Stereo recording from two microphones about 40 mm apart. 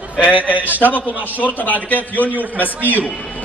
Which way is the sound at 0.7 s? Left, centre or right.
Left.